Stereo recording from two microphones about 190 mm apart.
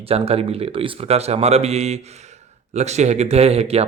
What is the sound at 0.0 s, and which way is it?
Speech, 30° right (ahead or behind).